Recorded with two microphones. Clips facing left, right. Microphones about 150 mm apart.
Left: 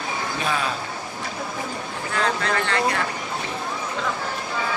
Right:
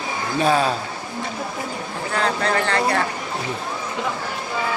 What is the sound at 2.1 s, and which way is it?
Speech, 40° right (ahead or behind).